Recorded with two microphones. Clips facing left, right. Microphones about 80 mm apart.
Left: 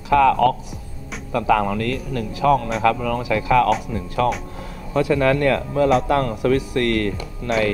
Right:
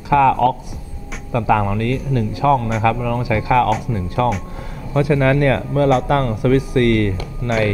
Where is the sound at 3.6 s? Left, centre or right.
Centre.